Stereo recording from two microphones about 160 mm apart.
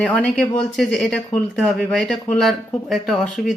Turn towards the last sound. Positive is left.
turn(degrees=0)  # may be behind; listen again after turning